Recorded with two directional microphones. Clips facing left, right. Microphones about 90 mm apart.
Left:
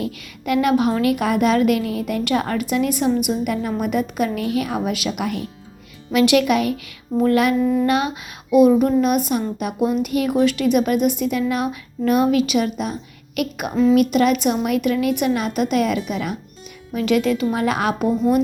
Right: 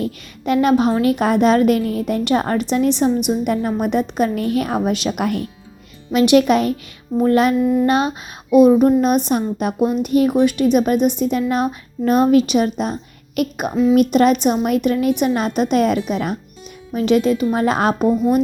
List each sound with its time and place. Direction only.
0.0 s a woman's voice: 30° right (ahead or behind)
6.1 s a woman's voice: 25° right (ahead or behind); by 16.4 s 40° right (ahead or behind)
16.9 s a woman's voice: 25° right (ahead or behind)